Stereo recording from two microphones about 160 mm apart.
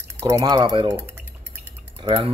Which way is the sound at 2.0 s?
35° right (ahead or behind).